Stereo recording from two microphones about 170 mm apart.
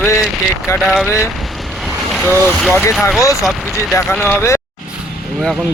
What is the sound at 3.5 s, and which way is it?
Speech, centre (ahead or behind).